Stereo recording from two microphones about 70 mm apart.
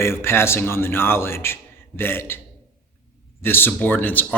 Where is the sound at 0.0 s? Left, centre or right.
Left.